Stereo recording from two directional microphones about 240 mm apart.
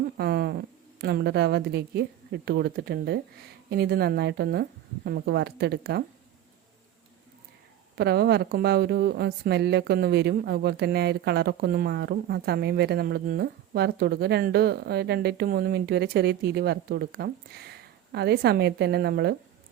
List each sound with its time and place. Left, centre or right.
0.2 s a sound: right
0.9 s speech: right
7.9 s speech: right